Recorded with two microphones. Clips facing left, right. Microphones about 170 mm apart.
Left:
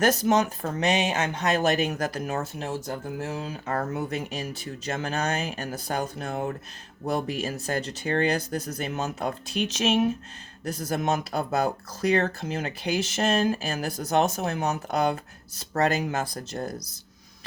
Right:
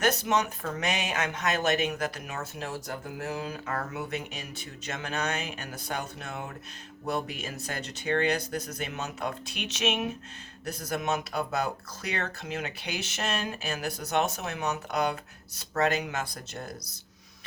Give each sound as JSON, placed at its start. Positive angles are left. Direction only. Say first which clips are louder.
{"t": 0.0, "sound": "speech", "louder": "left 5 dB", "side_deg": 40}